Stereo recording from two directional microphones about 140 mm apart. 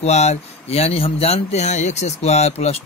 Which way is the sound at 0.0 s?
50° left (ahead or behind).